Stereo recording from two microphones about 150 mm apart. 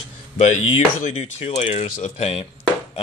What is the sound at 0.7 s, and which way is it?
Speech, 45° left (ahead or behind).